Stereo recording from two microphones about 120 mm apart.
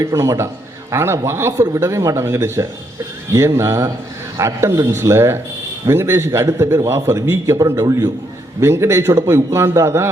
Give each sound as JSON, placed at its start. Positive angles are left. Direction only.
{"t": 0.0, "sound": "a man's voice", "side_deg": -25}